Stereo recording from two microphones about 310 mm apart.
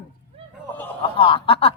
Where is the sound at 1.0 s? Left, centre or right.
Centre.